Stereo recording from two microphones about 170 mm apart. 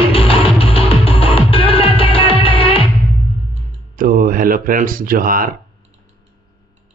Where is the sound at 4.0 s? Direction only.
55° right (ahead or behind).